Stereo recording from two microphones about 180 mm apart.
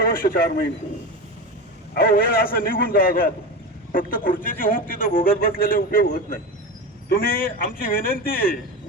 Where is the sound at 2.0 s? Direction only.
55° left (ahead or behind).